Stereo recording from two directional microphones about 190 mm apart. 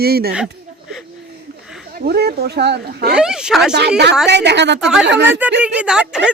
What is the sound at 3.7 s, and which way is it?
A woman's voice, 60° right (ahead or behind).